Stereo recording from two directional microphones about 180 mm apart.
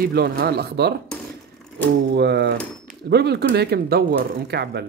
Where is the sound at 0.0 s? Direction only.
60° right (ahead or behind).